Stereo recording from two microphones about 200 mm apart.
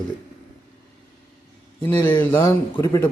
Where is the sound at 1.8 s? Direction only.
10° left (ahead or behind).